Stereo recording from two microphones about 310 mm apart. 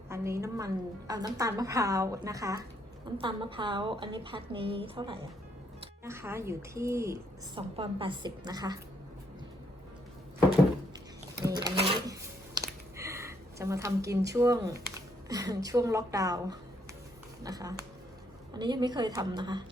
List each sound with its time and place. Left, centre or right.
0.1 s a woman's voice: centre
11.4 s sewing machine: centre
12.5 s a sound: centre
14.3 s a woman's voice: centre